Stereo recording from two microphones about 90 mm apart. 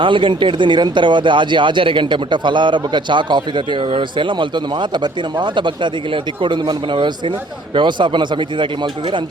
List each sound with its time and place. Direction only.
0.0 s speech: 65° right (ahead or behind)